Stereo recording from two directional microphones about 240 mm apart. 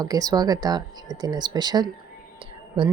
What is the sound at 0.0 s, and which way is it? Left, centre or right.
Speech, centre.